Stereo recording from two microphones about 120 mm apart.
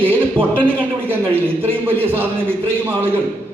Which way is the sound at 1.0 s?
15° right (ahead or behind).